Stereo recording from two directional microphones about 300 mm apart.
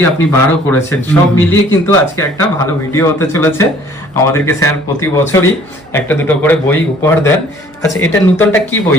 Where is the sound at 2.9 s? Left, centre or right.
Centre.